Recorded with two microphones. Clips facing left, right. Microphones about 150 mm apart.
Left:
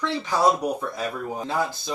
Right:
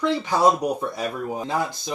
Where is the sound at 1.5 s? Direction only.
15° right (ahead or behind).